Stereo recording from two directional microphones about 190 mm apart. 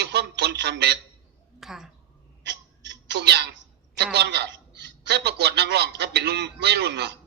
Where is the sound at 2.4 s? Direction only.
65° right (ahead or behind).